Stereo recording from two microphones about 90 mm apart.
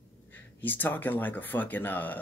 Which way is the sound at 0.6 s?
20° left (ahead or behind).